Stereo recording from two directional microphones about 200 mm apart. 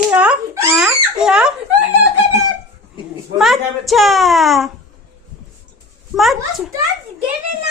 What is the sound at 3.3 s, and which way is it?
Speech, centre (ahead or behind).